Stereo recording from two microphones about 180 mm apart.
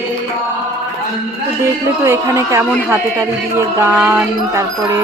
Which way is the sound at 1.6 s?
15° right (ahead or behind).